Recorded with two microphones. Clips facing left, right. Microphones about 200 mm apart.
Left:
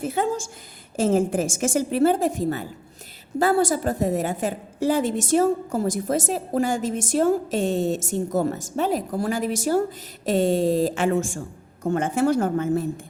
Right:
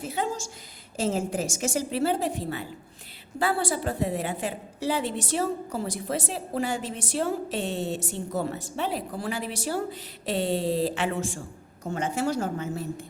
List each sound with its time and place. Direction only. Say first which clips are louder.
0.0 s a woman's voice: left 6 dB; 50° left (ahead or behind)